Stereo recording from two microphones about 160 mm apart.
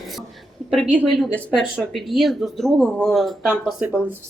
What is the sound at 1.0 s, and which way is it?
Speech, centre (ahead or behind).